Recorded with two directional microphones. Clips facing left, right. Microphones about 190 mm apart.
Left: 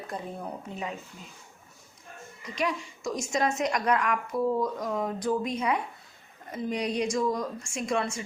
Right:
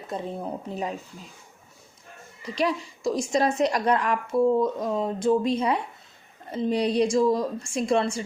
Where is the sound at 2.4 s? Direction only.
35° right (ahead or behind).